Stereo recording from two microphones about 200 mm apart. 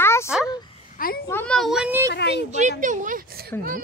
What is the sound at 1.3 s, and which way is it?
Speech, 5° left (ahead or behind).